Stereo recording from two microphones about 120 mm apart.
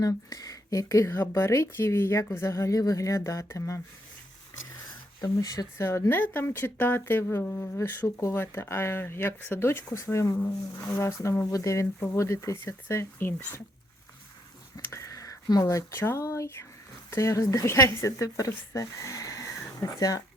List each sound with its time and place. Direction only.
0.0 s speech: 30° left (ahead or behind)
5.2 s speech: 30° left (ahead or behind)
14.8 s speech: 25° left (ahead or behind)